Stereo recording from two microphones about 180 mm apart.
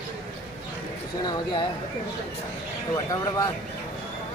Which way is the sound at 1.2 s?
25° left (ahead or behind).